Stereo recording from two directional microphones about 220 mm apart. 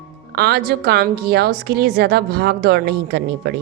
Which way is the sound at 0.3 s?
45° right (ahead or behind).